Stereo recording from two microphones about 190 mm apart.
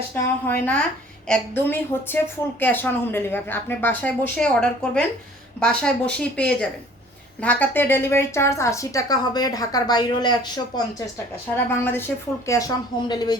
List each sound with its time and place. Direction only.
0.1 s a woman's voice: 10° left (ahead or behind)
11.9 s a woman's voice: 10° left (ahead or behind)